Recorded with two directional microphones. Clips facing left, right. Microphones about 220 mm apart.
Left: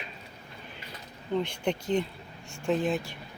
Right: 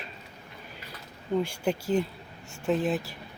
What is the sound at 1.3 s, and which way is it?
Speech, 5° right (ahead or behind).